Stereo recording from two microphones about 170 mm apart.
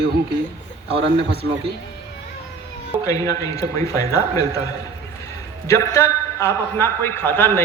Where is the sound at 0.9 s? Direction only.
35° right (ahead or behind).